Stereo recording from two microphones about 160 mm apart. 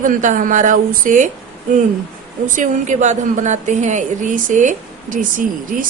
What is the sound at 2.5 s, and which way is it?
A woman's voice, 50° right (ahead or behind).